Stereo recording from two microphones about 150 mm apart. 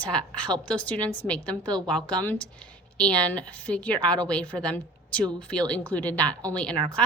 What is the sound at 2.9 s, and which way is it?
A woman's voice, 10° left (ahead or behind).